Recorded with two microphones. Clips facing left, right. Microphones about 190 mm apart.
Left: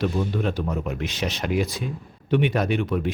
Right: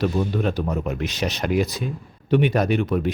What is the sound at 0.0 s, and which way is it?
Speech, 40° right (ahead or behind).